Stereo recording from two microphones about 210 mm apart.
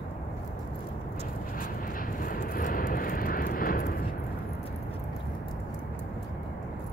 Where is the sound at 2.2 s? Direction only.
40° left (ahead or behind).